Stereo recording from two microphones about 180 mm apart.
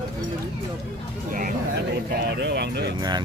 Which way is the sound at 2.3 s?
65° right (ahead or behind).